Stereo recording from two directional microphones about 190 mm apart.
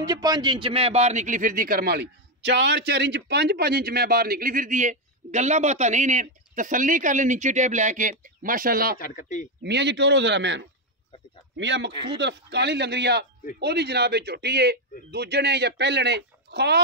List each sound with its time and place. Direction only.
0.0 s a man's voice: 20° right (ahead or behind); by 8.9 s 50° right (ahead or behind)
8.9 s speech: 45° left (ahead or behind)
9.6 s a man's voice: 65° right (ahead or behind)